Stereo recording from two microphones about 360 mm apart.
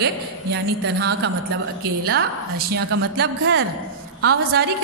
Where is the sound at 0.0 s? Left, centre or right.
Right.